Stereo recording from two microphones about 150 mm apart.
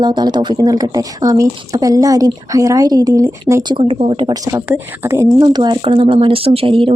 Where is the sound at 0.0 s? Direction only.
30° right (ahead or behind).